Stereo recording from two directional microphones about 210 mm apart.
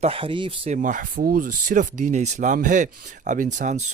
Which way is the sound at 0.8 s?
40° right (ahead or behind).